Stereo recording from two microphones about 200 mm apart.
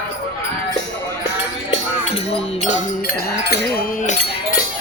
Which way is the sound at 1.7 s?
35° left (ahead or behind).